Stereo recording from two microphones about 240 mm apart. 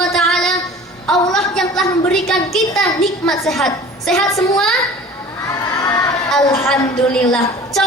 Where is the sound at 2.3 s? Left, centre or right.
Centre.